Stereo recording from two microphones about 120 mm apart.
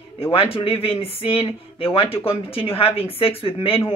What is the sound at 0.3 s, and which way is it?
Speech, 50° left (ahead or behind).